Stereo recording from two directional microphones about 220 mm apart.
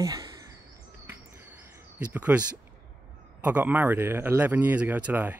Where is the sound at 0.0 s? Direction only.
15° right (ahead or behind).